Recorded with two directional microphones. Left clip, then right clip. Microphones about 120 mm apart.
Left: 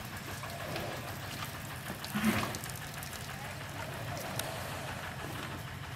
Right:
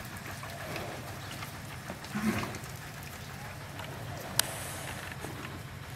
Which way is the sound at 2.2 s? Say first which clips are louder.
Left 1 dB; 35° left (ahead or behind).